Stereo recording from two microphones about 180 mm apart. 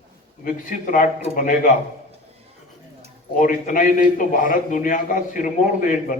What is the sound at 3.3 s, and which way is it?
A man's voice, 45° left (ahead or behind).